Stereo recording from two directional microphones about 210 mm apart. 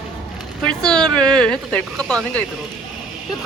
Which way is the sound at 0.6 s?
5° left (ahead or behind).